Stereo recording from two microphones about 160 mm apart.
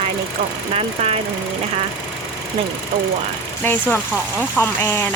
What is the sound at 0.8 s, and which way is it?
Speech, 40° right (ahead or behind).